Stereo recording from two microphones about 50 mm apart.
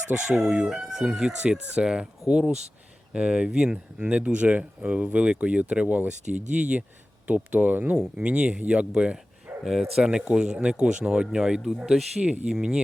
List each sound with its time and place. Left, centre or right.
0.1 s speech: right
8.1 s speech: right
9.6 s speech: centre
10.0 s speech: centre